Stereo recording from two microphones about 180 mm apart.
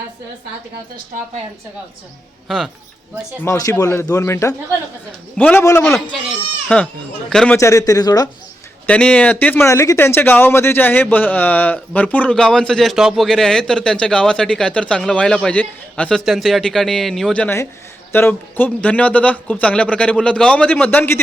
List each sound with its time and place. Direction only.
3.4 s speech: 15° left (ahead or behind)
6.1 s speech: 5° left (ahead or behind)
7.6 s a man's voice: 15° left (ahead or behind)
8.9 s speech: 5° left (ahead or behind)